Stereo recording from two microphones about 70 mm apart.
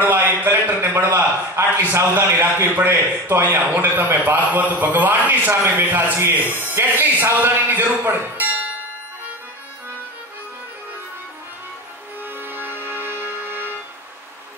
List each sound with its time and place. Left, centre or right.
0.1 s a sound: right
0.8 s a man's voice: right
5.5 s a man's voice: right
5.9 s a man's voice: right
6.4 s speech: left
6.7 s a man's voice: right
12.4 s music: right